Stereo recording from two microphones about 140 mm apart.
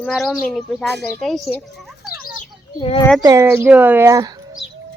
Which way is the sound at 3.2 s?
25° right (ahead or behind).